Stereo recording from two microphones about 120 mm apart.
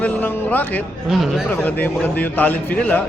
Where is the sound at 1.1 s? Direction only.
Centre (ahead or behind).